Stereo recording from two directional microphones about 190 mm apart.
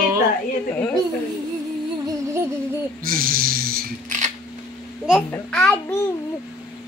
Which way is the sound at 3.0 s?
50° right (ahead or behind).